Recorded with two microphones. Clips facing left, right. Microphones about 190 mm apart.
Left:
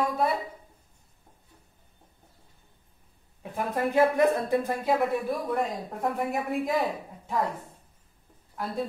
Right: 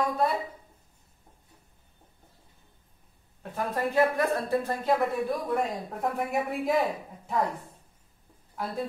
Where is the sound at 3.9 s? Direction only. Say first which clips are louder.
Left 3 dB; 15° left (ahead or behind).